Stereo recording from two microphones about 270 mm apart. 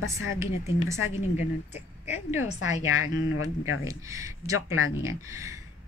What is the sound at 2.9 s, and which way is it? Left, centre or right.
Speech, left.